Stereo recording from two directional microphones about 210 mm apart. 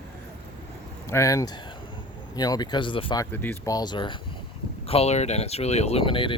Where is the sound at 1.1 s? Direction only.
15° left (ahead or behind).